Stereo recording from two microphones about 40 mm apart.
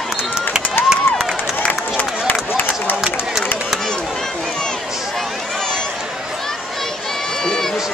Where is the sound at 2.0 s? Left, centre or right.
Left.